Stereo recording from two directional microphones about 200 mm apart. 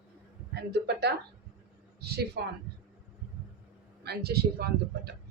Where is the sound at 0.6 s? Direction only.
55° right (ahead or behind).